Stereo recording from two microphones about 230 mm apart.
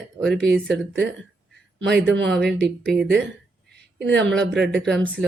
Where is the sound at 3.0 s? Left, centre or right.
Right.